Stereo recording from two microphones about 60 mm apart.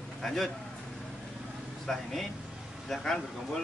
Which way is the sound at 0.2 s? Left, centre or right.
Centre.